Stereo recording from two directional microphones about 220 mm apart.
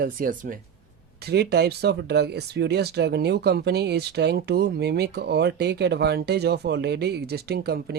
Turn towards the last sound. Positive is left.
turn(degrees=-45)  # may be behind; listen again after turning